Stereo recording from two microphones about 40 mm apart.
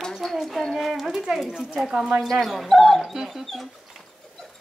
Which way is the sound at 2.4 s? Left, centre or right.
Centre.